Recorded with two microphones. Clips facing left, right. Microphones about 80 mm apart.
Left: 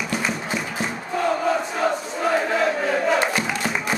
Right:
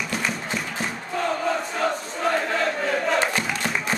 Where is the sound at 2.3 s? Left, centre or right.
Centre.